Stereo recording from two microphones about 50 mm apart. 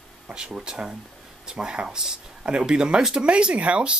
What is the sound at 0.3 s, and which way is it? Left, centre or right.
Speech, centre.